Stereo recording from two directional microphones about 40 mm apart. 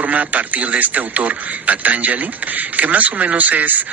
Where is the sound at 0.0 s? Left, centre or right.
Right.